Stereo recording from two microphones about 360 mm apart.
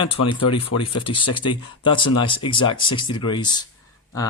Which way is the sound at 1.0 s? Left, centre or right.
Centre.